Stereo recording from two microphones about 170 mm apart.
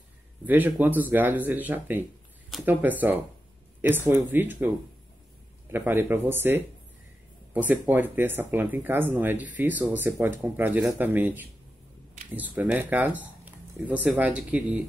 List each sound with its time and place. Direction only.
0.5 s speech: 10° right (ahead or behind)
12.5 s speech: 10° right (ahead or behind)